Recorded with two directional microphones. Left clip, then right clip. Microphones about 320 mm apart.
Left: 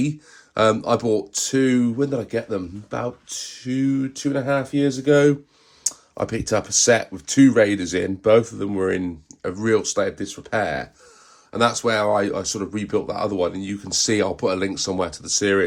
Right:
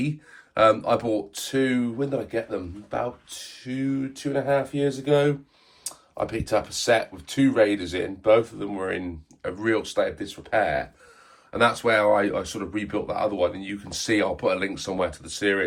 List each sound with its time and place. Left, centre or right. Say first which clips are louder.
0.5 s speech: left 1 dB; centre